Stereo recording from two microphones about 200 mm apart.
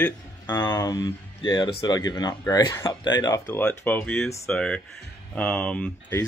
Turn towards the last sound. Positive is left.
turn(degrees=10)  # may be behind; listen again after turning